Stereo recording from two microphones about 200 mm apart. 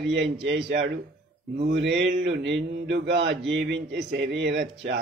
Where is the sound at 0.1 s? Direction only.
60° right (ahead or behind).